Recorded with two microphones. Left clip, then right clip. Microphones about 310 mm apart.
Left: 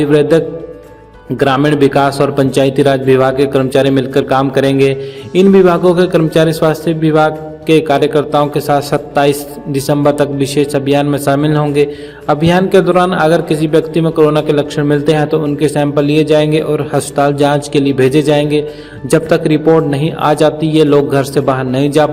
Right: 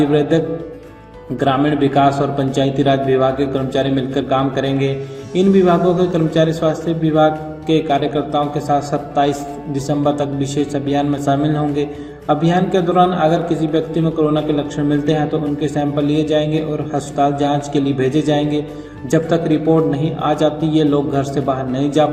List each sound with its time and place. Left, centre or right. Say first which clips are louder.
0.0 s a man's voice: left 5 dB; left